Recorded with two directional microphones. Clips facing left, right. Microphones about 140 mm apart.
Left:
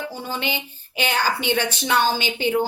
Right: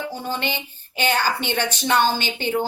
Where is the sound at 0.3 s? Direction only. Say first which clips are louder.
Even; 5° left (ahead or behind).